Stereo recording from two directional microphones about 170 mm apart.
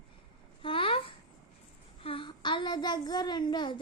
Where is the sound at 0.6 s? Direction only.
30° left (ahead or behind).